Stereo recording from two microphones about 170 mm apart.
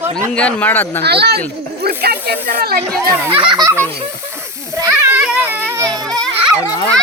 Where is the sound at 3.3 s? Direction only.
30° right (ahead or behind).